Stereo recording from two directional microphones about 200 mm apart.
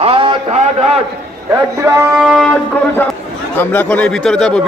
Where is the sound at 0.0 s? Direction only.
25° right (ahead or behind).